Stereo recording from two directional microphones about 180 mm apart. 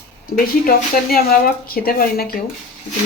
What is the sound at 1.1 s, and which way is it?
Speech, 55° left (ahead or behind).